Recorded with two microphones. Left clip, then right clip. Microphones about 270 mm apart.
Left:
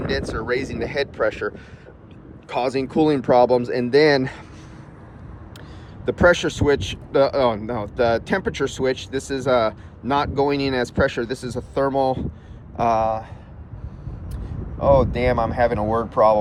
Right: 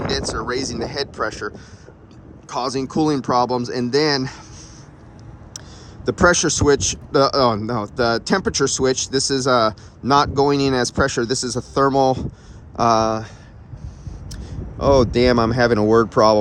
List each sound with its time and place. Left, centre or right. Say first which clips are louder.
0.1 s speech: left 2 dB; centre
6.2 s speech: right 1 dB; centre
14.9 s speech: right 3 dB; right